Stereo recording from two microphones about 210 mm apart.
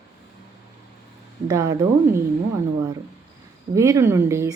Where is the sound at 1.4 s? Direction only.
15° right (ahead or behind).